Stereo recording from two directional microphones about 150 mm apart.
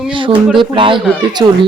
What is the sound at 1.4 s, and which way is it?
Speech, 25° right (ahead or behind).